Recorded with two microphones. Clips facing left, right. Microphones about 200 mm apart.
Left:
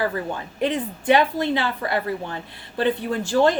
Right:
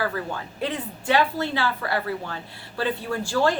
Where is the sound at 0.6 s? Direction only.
15° left (ahead or behind).